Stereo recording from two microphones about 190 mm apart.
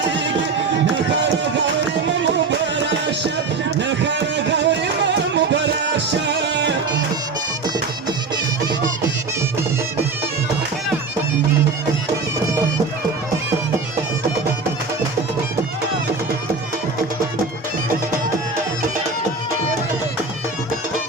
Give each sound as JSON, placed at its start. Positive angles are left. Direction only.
{"t": 2.0, "sound": "music", "side_deg": -70}